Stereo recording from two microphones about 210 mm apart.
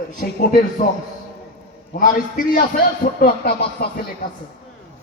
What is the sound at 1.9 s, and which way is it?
A man's voice, 40° left (ahead or behind).